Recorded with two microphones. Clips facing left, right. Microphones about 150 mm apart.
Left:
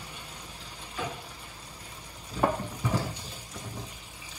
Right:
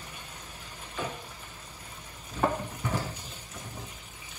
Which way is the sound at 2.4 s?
10° left (ahead or behind).